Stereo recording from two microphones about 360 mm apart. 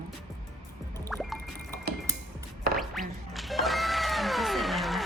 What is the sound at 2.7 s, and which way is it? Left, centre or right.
Music, centre.